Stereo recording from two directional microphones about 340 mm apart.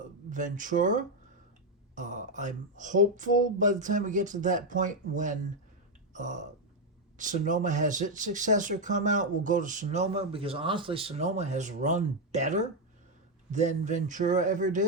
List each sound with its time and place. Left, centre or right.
0.0 s speech: right